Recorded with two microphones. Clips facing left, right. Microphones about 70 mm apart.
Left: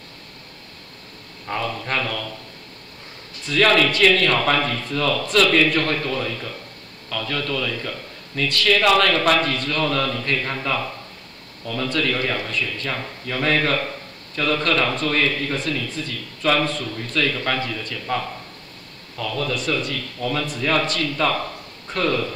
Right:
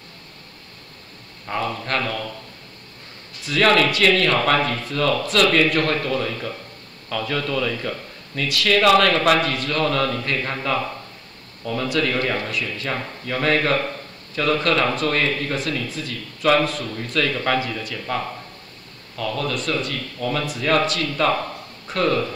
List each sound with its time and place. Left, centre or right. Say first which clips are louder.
1.5 s speech: right 1 dB; centre
3.4 s speech: even; centre